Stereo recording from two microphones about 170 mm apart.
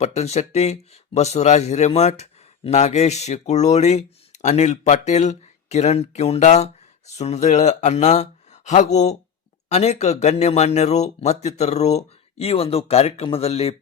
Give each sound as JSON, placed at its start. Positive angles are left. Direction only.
{"t": 0.0, "sound": "speech", "side_deg": 40}